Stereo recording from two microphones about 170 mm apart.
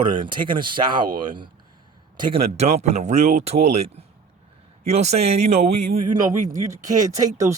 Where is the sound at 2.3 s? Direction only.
40° right (ahead or behind).